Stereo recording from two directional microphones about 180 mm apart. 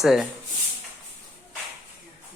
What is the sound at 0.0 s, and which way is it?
Speech, centre (ahead or behind).